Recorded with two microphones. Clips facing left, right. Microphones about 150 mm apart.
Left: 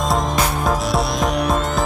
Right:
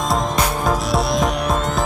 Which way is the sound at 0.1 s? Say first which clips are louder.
Right 2 dB; centre (ahead or behind).